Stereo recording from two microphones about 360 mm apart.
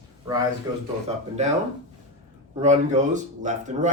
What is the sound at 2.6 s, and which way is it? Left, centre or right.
Speech, centre.